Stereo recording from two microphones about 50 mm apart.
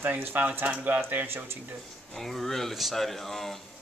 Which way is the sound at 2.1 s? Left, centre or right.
Centre.